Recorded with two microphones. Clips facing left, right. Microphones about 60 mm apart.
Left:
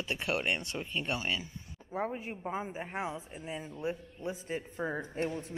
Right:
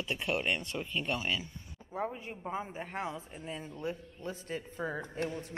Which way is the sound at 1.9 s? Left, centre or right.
Left.